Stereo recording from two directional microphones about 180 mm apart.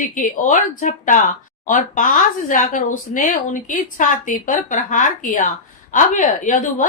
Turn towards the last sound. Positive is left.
turn(degrees=45)  # may be behind; listen again after turning